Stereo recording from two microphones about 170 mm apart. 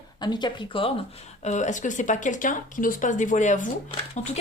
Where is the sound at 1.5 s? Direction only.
45° left (ahead or behind).